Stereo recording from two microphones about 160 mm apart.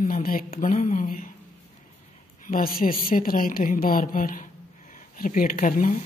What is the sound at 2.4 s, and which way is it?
Speech, 65° left (ahead or behind).